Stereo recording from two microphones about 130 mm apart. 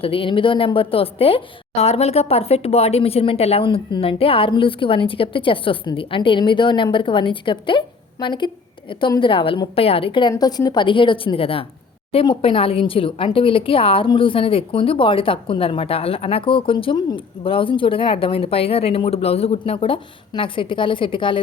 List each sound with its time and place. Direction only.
0.0 s a woman's voice: 45° left (ahead or behind)